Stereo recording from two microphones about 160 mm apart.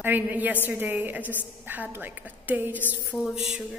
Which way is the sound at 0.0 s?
10° right (ahead or behind).